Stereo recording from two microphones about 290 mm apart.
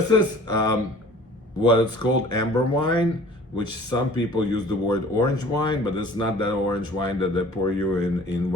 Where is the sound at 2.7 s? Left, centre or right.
Centre.